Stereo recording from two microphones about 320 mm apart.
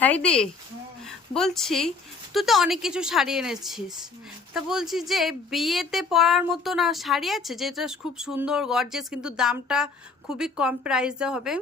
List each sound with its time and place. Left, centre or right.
0.0 s speech: centre